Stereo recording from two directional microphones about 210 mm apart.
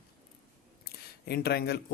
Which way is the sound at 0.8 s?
50° left (ahead or behind).